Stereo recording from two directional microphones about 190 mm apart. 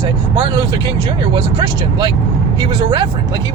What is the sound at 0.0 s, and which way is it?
Speech, 25° right (ahead or behind).